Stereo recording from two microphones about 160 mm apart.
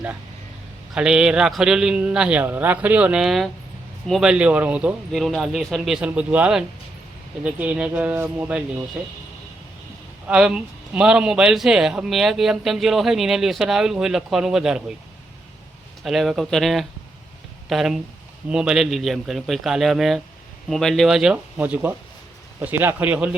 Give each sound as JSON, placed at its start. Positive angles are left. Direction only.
{"t": 0.9, "sound": "a man's voice", "side_deg": -5}
{"t": 10.2, "sound": "a man's voice", "side_deg": -5}
{"t": 16.0, "sound": "a man's voice", "side_deg": 0}